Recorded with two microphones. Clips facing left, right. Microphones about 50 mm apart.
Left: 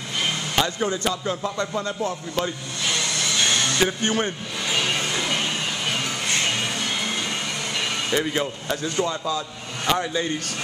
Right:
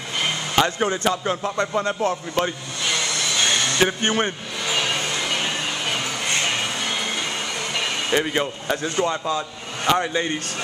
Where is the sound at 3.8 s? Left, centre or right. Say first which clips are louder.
Right 3 dB; right.